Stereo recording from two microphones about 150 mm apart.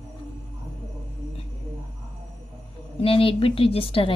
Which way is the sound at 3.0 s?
35° left (ahead or behind).